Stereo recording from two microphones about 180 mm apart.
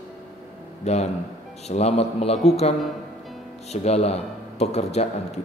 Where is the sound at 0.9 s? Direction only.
40° left (ahead or behind).